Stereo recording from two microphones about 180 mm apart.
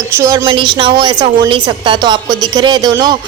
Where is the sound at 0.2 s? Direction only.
20° right (ahead or behind).